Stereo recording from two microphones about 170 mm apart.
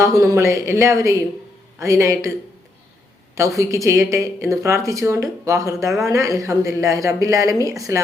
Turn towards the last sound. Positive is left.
turn(degrees=-20)  # may be behind; listen again after turning